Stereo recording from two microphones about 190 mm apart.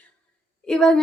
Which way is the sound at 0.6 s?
5° left (ahead or behind).